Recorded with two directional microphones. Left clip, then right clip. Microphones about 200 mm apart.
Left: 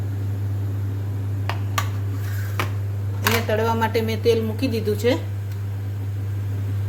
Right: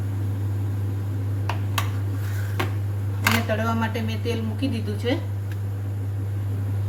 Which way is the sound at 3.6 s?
60° left (ahead or behind).